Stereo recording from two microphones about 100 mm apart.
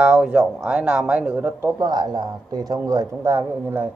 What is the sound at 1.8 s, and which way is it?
Speech, 45° right (ahead or behind).